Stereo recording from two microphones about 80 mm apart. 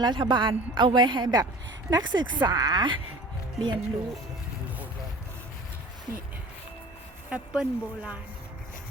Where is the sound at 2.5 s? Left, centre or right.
Right.